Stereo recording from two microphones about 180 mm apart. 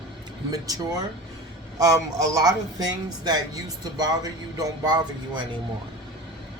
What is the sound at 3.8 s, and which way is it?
A man's voice, 20° right (ahead or behind).